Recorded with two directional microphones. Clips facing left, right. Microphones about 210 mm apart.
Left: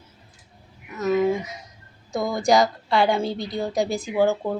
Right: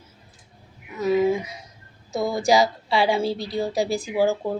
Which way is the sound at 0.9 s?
10° right (ahead or behind).